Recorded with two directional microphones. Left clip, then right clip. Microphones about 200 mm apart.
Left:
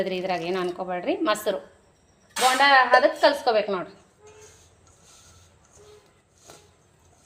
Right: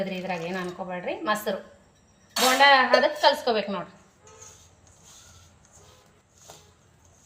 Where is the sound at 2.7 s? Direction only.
35° left (ahead or behind).